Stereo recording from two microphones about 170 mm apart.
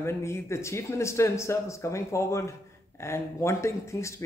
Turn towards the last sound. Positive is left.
turn(degrees=15)  # may be behind; listen again after turning